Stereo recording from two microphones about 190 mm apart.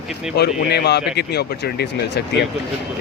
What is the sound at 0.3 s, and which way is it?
Speech, 60° left (ahead or behind).